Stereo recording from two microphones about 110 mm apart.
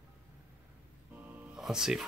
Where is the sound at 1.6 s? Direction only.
5° right (ahead or behind).